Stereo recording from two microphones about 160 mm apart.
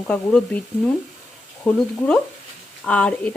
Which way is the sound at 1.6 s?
10° left (ahead or behind).